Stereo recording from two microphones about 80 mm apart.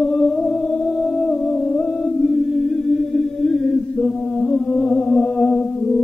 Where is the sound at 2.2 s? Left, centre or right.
Centre.